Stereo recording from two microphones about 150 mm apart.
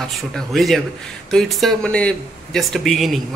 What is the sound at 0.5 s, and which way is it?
A man's voice, centre (ahead or behind).